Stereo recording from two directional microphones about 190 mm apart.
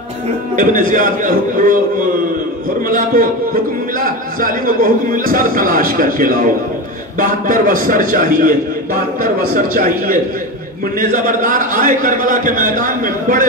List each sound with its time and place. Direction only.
0.6 s a man's voice: 45° right (ahead or behind)
4.0 s a man's voice: 45° right (ahead or behind)